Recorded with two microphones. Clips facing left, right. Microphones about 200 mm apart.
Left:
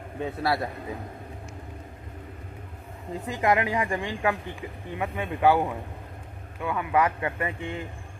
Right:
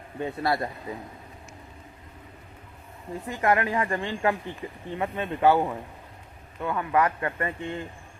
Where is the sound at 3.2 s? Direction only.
15° left (ahead or behind).